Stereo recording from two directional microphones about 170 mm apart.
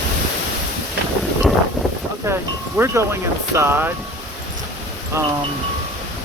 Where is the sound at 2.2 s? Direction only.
15° right (ahead or behind).